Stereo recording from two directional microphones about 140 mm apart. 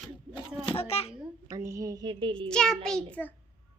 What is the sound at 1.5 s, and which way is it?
Speech, 25° right (ahead or behind).